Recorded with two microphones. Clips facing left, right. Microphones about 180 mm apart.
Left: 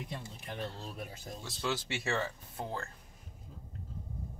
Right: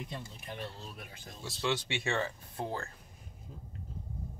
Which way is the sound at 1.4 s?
Centre (ahead or behind).